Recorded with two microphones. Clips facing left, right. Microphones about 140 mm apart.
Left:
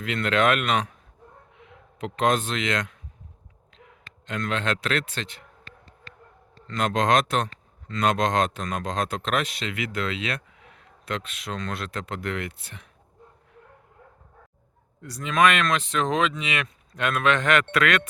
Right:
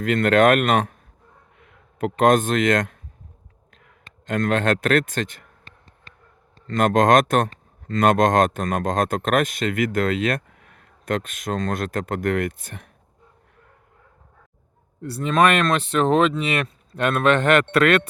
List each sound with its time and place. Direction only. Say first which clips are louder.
0.0 s a man's voice: right 7 dB; 50° right (ahead or behind)
6.7 s speech: right 6 dB; 50° right (ahead or behind)
15.2 s speech: right 3 dB; 35° right (ahead or behind)